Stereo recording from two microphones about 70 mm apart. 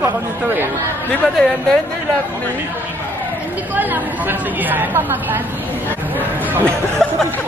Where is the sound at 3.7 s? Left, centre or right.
Right.